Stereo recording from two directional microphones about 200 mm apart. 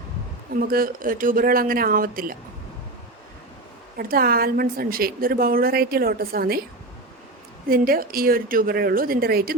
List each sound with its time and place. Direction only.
0.5 s a woman's voice: 45° right (ahead or behind)
3.9 s a woman's voice: 50° right (ahead or behind)
7.7 s a woman's voice: 45° right (ahead or behind)